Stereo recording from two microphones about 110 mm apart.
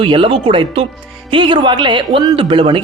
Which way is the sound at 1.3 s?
45° right (ahead or behind).